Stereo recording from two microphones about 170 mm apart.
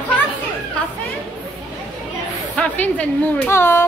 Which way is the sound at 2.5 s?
5° left (ahead or behind).